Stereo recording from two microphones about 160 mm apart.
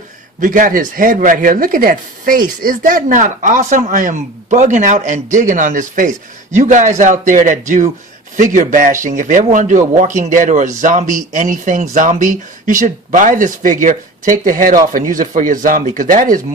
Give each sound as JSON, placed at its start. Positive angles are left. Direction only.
{"t": 0.4, "sound": "speech", "side_deg": -55}